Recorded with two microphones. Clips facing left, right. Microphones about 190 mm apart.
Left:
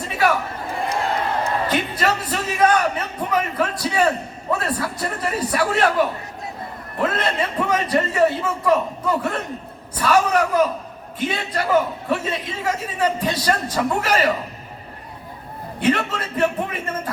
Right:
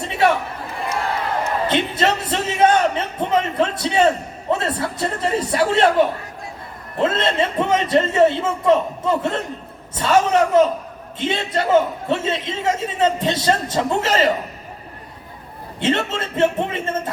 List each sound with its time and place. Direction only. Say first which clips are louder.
0.0 s chatter: right 2 dB; 25° right (ahead or behind)
1.6 s a man's voice: right 2 dB; 25° right (ahead or behind)
15.8 s a man's voice: even; 25° right (ahead or behind)